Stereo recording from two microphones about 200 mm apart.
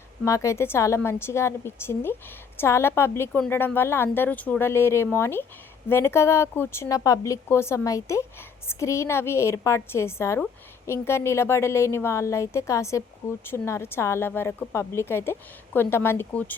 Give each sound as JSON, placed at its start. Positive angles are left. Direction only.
{"t": 0.3, "sound": "speech", "side_deg": 15}